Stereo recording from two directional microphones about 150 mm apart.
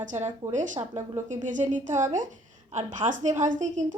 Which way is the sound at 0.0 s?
55° right (ahead or behind).